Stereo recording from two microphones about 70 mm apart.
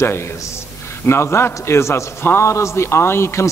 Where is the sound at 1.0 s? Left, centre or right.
Left.